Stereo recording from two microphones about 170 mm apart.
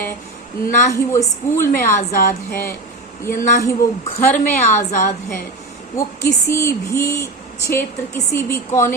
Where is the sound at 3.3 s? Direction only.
55° left (ahead or behind).